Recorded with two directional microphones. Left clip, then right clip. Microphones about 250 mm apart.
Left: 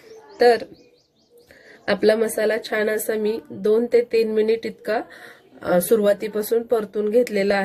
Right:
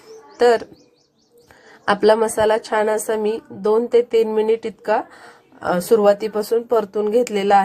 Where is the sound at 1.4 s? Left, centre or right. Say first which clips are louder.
Right 5 dB; right.